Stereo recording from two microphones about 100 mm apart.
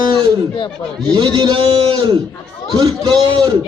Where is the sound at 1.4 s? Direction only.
65° right (ahead or behind).